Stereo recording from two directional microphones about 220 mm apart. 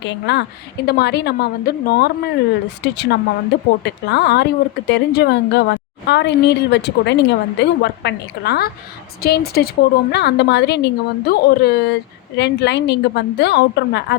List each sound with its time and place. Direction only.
0.0 s a woman's voice: 50° left (ahead or behind)